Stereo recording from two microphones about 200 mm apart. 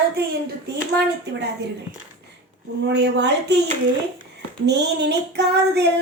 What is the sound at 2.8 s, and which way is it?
Child singing, 60° right (ahead or behind).